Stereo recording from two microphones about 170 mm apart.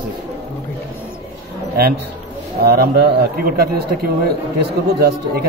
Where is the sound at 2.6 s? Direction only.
70° right (ahead or behind).